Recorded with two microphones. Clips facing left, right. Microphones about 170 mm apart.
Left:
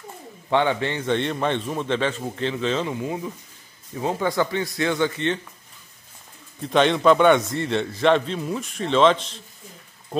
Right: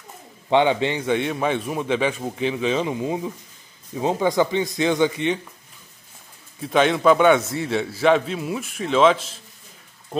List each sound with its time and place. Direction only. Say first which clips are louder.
0.5 s a man's voice: right 3 dB; 20° right (ahead or behind)
6.6 s a man's voice: even; 5° right (ahead or behind)